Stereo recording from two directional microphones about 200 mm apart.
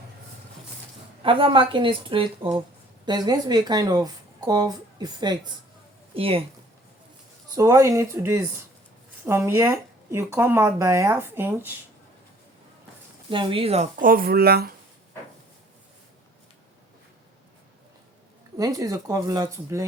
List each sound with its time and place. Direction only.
1.2 s speech: 25° right (ahead or behind)
7.5 s speech: 15° right (ahead or behind)
13.3 s speech: 25° right (ahead or behind)
14.0 s speech: 45° right (ahead or behind)
18.5 s speech: 15° right (ahead or behind)